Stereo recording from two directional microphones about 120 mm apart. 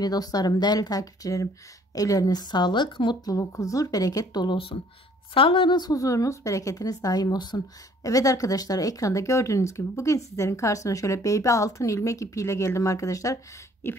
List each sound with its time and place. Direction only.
0.0 s speech: 30° left (ahead or behind)
3.3 s a woman's voice: 25° left (ahead or behind)